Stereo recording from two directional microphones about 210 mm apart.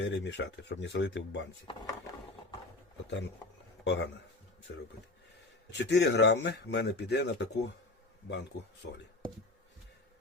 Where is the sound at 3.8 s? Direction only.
55° left (ahead or behind).